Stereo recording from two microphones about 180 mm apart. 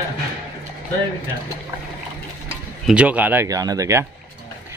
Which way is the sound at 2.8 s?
5° right (ahead or behind).